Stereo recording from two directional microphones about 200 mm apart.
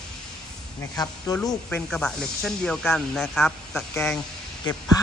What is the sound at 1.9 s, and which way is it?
Speech, 5° left (ahead or behind).